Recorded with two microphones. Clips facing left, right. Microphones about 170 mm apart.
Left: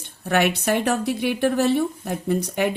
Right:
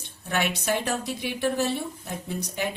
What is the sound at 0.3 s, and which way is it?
Speech, 60° left (ahead or behind).